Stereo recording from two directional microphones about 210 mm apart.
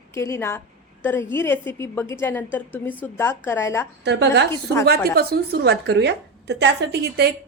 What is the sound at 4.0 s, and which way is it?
A woman's voice, 55° right (ahead or behind).